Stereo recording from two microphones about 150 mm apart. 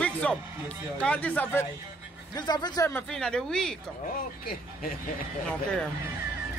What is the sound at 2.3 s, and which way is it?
Speech, 30° left (ahead or behind).